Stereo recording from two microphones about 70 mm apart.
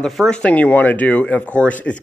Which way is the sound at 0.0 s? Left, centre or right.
Centre.